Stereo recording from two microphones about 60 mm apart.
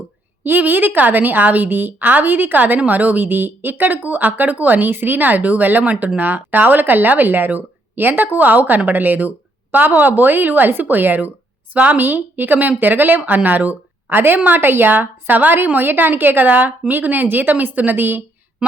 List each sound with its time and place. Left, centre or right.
0.4 s a woman's voice: right